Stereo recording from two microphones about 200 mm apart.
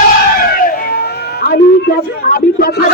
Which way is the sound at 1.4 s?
45° left (ahead or behind).